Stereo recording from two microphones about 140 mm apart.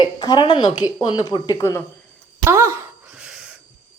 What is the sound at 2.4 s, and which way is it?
Speech, 20° right (ahead or behind).